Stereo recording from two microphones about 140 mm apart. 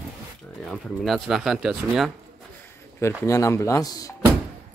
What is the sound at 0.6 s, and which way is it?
Speech, 5° left (ahead or behind).